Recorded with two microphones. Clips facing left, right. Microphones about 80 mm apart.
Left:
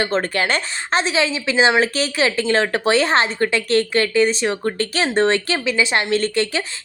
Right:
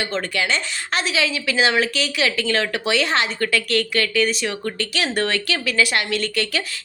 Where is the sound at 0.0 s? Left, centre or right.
Left.